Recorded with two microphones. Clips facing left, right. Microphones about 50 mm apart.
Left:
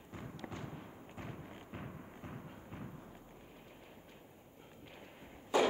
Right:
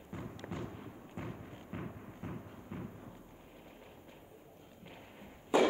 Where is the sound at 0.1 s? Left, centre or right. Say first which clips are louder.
Right 3 dB; centre.